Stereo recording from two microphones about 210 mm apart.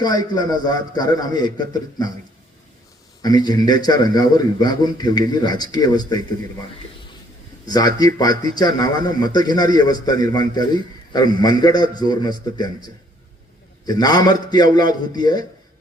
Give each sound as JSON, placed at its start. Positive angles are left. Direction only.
{"t": 0.0, "sound": "a man's voice", "side_deg": 20}
{"t": 3.2, "sound": "a man's voice", "side_deg": 20}
{"t": 7.7, "sound": "a man's voice", "side_deg": 20}
{"t": 13.8, "sound": "a man's voice", "side_deg": 20}